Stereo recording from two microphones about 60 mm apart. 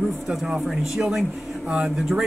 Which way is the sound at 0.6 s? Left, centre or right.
Centre.